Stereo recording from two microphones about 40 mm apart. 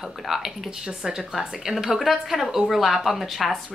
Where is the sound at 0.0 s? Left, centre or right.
Centre.